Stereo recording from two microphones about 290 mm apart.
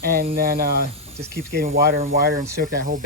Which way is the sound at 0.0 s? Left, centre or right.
Right.